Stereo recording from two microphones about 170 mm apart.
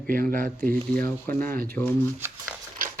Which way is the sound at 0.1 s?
55° right (ahead or behind).